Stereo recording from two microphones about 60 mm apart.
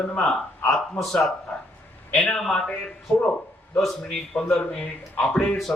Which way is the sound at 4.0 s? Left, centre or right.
Centre.